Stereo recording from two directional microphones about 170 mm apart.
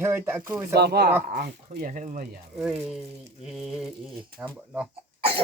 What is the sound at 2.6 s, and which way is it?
Speech, 5° right (ahead or behind).